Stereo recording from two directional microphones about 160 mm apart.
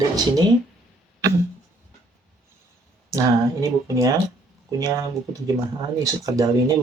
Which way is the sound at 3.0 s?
20° right (ahead or behind).